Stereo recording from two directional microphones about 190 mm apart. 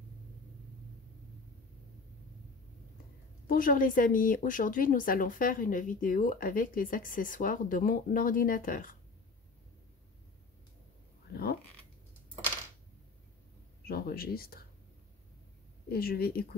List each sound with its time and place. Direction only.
3.4 s speech: 45° left (ahead or behind)
13.8 s speech: 50° left (ahead or behind)
15.9 s speech: 55° left (ahead or behind)